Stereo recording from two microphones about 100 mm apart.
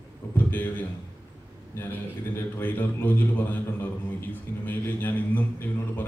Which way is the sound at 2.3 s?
20° left (ahead or behind).